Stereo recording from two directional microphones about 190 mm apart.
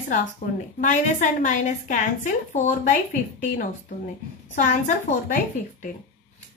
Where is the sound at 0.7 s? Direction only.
40° left (ahead or behind).